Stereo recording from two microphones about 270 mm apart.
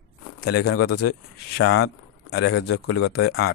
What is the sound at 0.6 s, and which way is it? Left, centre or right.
Speech, left.